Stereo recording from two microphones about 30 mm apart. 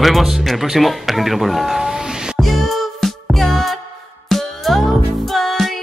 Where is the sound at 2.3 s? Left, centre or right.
Centre.